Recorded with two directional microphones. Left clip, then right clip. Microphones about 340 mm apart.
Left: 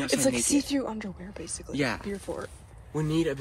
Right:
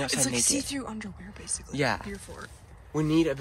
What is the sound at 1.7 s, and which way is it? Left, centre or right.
Speech, right.